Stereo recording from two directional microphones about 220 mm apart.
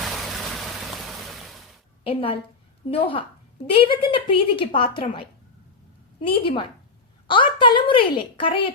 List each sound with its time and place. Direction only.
0.0 s a sound: centre (ahead or behind)
2.0 s a woman's voice: 25° left (ahead or behind)
6.1 s a woman's voice: 25° left (ahead or behind)